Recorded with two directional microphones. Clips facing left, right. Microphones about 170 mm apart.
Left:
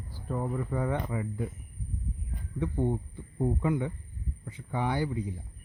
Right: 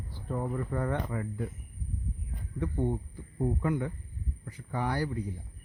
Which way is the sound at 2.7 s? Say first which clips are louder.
Left 1 dB; 15° left (ahead or behind).